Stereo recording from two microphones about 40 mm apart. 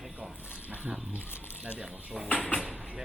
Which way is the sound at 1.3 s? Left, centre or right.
Left.